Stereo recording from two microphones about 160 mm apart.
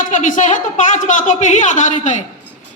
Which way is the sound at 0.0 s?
50° left (ahead or behind).